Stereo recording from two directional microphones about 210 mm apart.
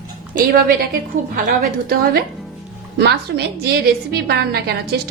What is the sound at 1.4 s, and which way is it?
A woman's voice, 45° right (ahead or behind).